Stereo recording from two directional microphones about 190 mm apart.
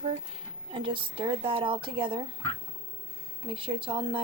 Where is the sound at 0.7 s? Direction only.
30° right (ahead or behind).